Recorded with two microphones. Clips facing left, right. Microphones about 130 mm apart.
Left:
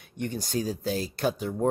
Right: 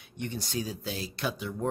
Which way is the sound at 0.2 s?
45° left (ahead or behind).